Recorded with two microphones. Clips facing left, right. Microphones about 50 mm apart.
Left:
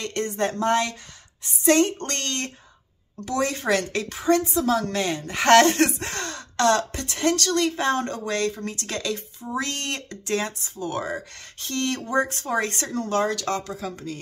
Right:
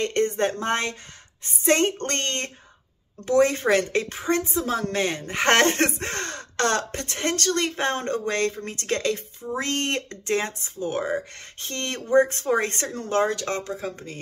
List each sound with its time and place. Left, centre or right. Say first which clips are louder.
0.0 s a woman's voice: right 3 dB; right